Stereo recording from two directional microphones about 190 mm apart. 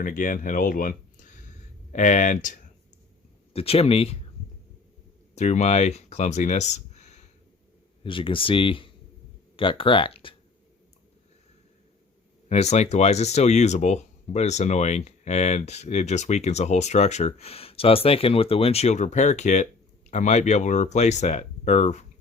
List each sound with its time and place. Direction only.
0.0 s speech: 45° left (ahead or behind)
3.5 s speech: 30° left (ahead or behind)
5.3 s speech: 35° left (ahead or behind)
8.0 s speech: 25° left (ahead or behind)
12.5 s speech: 35° left (ahead or behind)